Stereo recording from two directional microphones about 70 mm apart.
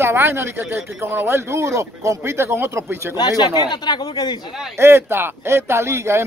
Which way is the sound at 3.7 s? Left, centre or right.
Left.